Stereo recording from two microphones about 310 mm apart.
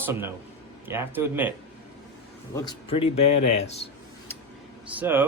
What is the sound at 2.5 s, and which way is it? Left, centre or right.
Speech, centre.